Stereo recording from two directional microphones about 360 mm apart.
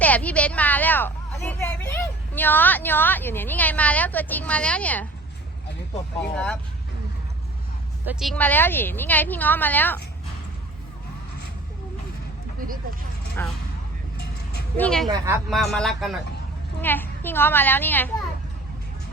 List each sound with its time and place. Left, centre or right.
0.0 s a woman's voice: centre
6.3 s a woman's voice: centre
8.0 s a woman's voice: centre
12.5 s a sound: right
13.4 s a woman's voice: centre
14.8 s a woman's voice: centre
15.0 s a woman's voice: centre